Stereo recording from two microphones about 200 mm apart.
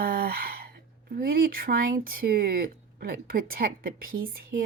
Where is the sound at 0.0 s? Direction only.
50° right (ahead or behind).